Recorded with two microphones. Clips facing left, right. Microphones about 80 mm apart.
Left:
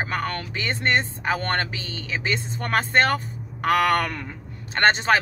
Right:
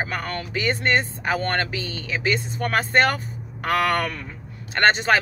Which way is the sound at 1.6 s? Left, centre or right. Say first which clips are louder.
Right 2 dB; left.